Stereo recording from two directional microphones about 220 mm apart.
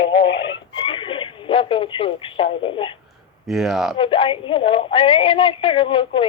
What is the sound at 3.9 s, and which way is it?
A woman's voice, 25° left (ahead or behind).